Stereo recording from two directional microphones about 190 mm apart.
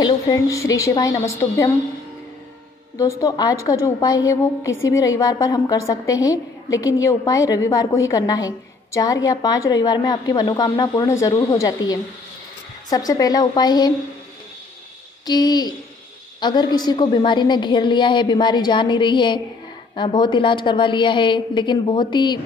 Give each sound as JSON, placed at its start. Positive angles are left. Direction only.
{"t": 0.0, "sound": "a woman's voice", "side_deg": 20}
{"t": 3.0, "sound": "a woman's voice", "side_deg": 15}
{"t": 15.2, "sound": "a woman's voice", "side_deg": 20}